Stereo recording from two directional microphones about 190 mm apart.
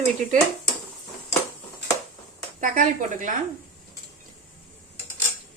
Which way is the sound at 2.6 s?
45° right (ahead or behind).